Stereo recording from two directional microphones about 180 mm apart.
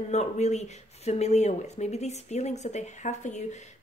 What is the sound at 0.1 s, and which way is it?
Speech, 40° left (ahead or behind).